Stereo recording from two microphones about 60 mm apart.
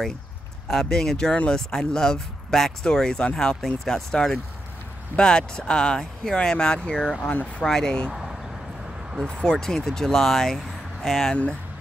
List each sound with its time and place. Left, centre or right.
0.7 s speech: centre; by 7.6 s left
7.6 s speech: centre
8.1 s a sound: centre
9.2 s speech: centre